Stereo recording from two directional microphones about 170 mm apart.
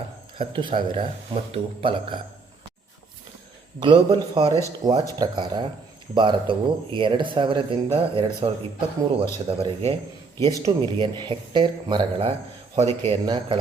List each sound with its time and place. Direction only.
0.3 s speech: 30° right (ahead or behind)
3.8 s speech: 30° right (ahead or behind)
4.9 s speech: 20° right (ahead or behind)
10.5 s speech: 25° right (ahead or behind)
12.7 s speech: 40° right (ahead or behind)